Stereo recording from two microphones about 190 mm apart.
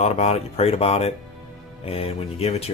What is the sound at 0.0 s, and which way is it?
Speech, 35° left (ahead or behind).